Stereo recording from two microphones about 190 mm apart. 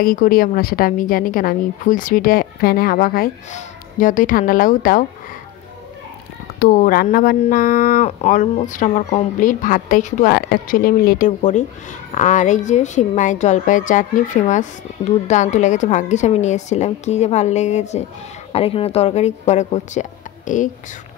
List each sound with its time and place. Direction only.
0.0 s a woman's voice: 50° left (ahead or behind)
6.6 s a woman's voice: 50° left (ahead or behind)